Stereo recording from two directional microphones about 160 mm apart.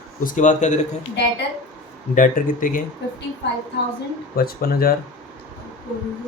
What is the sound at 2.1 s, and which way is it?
Speech, 55° left (ahead or behind).